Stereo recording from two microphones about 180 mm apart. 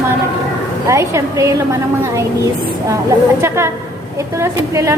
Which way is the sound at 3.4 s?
15° right (ahead or behind).